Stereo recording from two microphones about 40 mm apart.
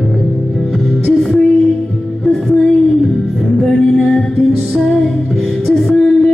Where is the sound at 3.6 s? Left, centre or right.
Centre.